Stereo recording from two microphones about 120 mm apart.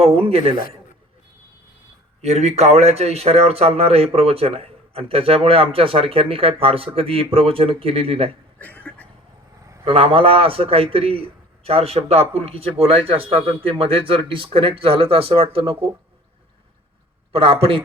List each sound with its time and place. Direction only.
0.0 s a man's voice: 55° right (ahead or behind)
2.2 s speech: 65° right (ahead or behind)
8.5 s a sound: 10° left (ahead or behind)
9.8 s speech: 50° right (ahead or behind)
17.3 s speech: 50° right (ahead or behind)